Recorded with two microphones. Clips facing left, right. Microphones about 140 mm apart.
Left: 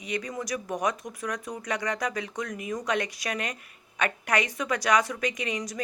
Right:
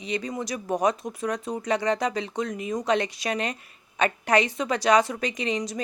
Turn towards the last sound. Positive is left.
turn(degrees=-25)  # may be behind; listen again after turning